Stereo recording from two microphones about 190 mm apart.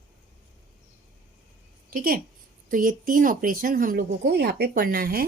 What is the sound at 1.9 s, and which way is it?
A woman's voice, 50° right (ahead or behind).